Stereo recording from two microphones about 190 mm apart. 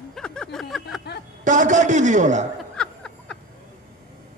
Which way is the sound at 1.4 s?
40° right (ahead or behind).